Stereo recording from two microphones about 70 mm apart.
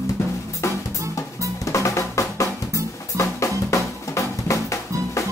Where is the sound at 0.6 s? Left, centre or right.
Left.